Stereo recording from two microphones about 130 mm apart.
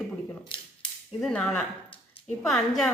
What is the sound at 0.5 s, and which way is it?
Speech, 40° left (ahead or behind).